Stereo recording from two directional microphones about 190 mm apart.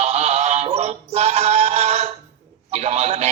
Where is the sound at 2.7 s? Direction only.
35° right (ahead or behind).